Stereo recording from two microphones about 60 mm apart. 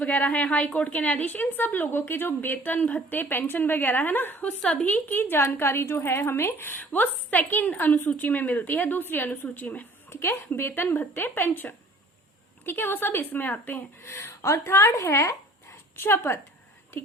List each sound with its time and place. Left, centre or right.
0.0 s a woman's voice: left
10.1 s a woman's voice: left
14.0 s speech: left
16.0 s speech: left